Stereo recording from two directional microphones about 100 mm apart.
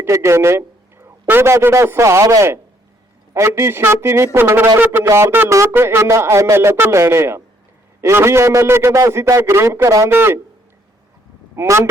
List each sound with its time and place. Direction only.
0.0 s a sound: 30° right (ahead or behind)
1.3 s a man's voice: 25° right (ahead or behind)
11.5 s a man's voice: 25° right (ahead or behind)